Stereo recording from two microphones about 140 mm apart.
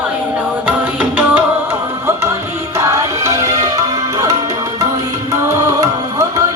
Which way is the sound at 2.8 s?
20° right (ahead or behind).